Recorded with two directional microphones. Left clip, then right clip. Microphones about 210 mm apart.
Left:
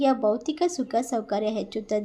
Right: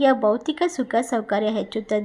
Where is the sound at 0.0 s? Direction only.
10° right (ahead or behind).